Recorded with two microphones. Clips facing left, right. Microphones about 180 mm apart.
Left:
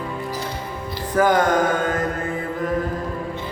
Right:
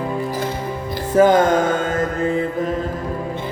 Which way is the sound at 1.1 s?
25° right (ahead or behind).